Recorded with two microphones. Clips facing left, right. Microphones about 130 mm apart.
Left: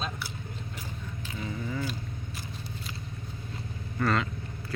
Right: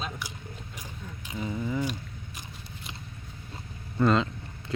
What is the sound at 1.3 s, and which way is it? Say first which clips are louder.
Speech: right 4 dB; 15° right (ahead or behind).